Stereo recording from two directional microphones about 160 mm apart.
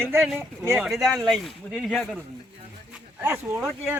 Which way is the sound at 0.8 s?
Centre (ahead or behind).